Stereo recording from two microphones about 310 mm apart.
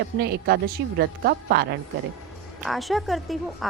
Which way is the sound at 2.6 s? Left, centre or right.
Centre.